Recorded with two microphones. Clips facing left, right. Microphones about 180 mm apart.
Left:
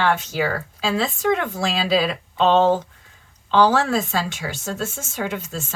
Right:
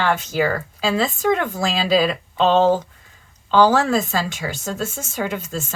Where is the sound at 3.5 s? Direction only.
45° right (ahead or behind).